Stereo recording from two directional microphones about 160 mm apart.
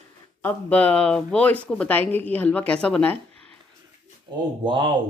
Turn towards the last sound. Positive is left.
turn(degrees=-30)  # may be behind; listen again after turning